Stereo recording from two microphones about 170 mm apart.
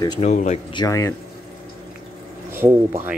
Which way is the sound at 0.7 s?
20° left (ahead or behind).